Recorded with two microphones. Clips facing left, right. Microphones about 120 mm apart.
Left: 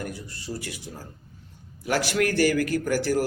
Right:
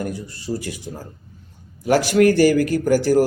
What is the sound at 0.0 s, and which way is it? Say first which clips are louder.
A man's voice: right 7 dB; 40° right (ahead or behind).